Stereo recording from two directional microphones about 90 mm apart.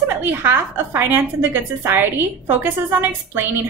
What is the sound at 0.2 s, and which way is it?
A woman's voice, 25° right (ahead or behind).